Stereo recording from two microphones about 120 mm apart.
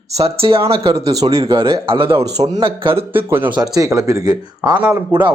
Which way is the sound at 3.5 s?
30° right (ahead or behind).